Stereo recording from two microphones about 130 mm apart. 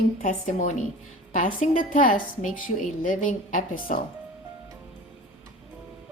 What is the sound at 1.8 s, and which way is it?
A woman's voice, 90° left.